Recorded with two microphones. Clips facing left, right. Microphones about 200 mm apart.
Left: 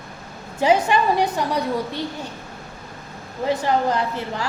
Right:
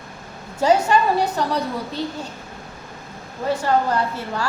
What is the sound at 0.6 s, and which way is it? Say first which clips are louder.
Speech: right 1 dB; 20° left (ahead or behind).